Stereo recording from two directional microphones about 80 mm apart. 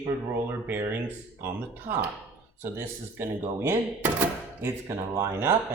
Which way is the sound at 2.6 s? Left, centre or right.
Right.